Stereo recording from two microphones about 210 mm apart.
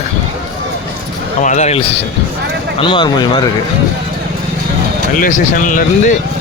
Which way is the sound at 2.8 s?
25° left (ahead or behind).